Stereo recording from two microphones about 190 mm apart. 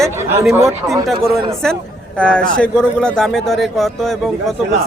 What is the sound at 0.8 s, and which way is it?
Speech, 15° right (ahead or behind).